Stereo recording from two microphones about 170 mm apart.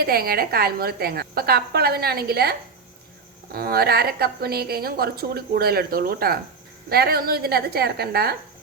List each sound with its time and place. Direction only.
0.0 s a woman's voice: 65° right (ahead or behind)